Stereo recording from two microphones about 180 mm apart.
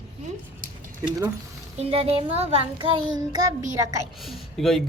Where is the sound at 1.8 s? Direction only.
35° right (ahead or behind).